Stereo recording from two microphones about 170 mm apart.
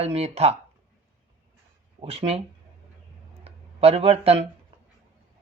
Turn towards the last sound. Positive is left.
turn(degrees=-35)  # may be behind; listen again after turning